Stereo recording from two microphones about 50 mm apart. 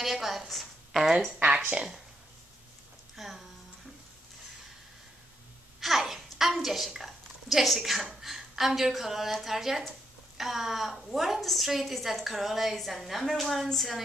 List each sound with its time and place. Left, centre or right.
0.0 s a woman's voice: centre
0.5 s a sound: centre
1.4 s speech: right
3.2 s speech: centre
5.8 s a child's voice: centre